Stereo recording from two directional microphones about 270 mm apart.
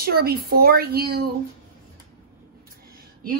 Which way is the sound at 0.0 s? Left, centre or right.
Right.